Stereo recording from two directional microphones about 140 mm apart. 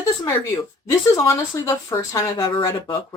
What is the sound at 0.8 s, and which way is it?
A woman's voice, 20° left (ahead or behind).